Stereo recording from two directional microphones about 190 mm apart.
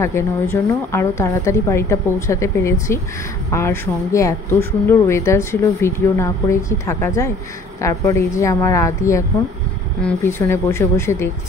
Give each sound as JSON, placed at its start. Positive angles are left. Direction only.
{"t": 0.0, "sound": "speech", "side_deg": 15}